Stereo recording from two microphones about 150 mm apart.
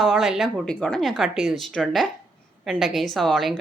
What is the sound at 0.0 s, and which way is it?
A woman's voice, centre (ahead or behind).